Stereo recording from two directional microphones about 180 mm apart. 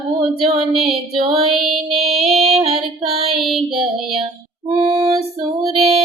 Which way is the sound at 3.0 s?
35° right (ahead or behind).